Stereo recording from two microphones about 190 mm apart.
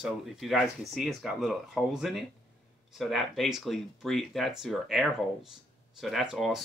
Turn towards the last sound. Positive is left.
turn(degrees=0)  # may be behind; listen again after turning